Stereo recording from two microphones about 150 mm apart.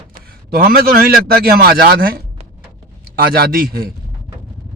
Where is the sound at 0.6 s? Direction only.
75° right (ahead or behind).